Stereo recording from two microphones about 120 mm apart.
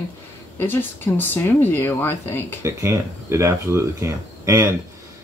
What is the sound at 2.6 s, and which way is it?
Speech, 20° right (ahead or behind).